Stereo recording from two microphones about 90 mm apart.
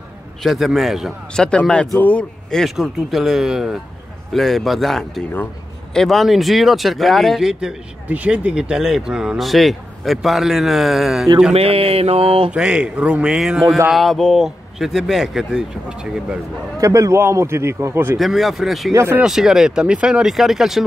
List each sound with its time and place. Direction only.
0.4 s speech: centre (ahead or behind)
1.3 s speech: 10° left (ahead or behind)
2.5 s speech: centre (ahead or behind)
8.1 s speech: 15° right (ahead or behind)
11.5 s mantra: 90° right
12.4 s a man's voice: 10° right (ahead or behind)
16.8 s a man's voice: 35° right (ahead or behind)
18.2 s speech: centre (ahead or behind)